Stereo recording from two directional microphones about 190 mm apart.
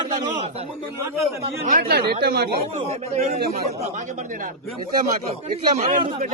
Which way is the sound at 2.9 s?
35° right (ahead or behind).